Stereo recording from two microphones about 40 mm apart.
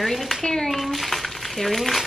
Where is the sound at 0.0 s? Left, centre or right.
Centre.